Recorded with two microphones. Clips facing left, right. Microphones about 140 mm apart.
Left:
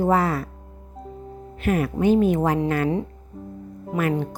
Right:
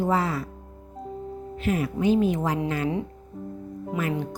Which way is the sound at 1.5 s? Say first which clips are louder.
Left 3 dB; 60° left (ahead or behind).